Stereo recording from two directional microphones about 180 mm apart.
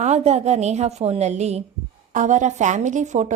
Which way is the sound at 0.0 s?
40° right (ahead or behind).